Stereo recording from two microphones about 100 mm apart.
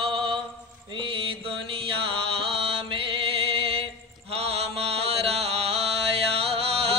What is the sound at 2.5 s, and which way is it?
Music, 65° right (ahead or behind).